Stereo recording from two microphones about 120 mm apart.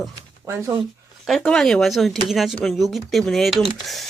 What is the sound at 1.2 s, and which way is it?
Speech, 5° left (ahead or behind).